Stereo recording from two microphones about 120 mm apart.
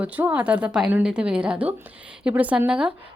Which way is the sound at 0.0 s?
15° right (ahead or behind).